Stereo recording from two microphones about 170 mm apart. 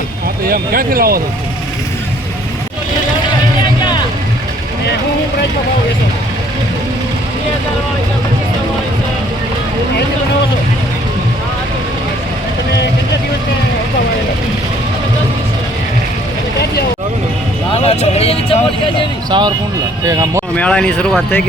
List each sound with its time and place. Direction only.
0.4 s speech: 60° right (ahead or behind)
17.8 s speech: 35° left (ahead or behind)
19.3 s speech: 25° right (ahead or behind)
20.6 s speech: 5° left (ahead or behind)